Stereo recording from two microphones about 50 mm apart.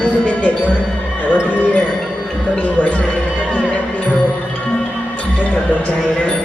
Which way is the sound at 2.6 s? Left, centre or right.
Left.